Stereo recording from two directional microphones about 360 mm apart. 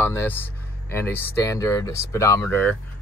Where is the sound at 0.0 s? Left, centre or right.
Centre.